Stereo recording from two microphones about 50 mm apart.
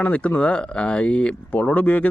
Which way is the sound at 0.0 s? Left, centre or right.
Left.